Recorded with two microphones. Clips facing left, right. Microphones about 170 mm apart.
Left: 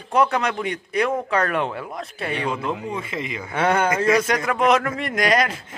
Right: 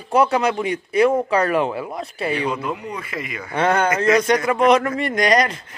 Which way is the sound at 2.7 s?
25° left (ahead or behind).